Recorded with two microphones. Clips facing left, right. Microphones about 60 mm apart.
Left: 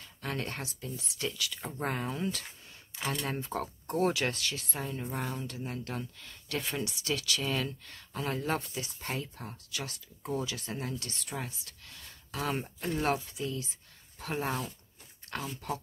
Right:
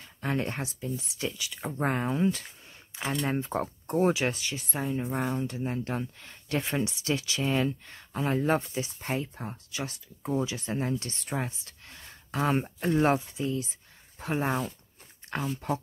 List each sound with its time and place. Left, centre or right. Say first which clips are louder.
0.0 s speech: right 6 dB; right